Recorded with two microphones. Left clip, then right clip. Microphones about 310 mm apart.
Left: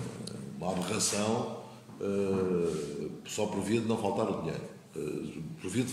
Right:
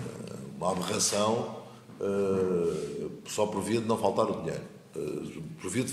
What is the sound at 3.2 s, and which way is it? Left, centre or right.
A man's voice, centre.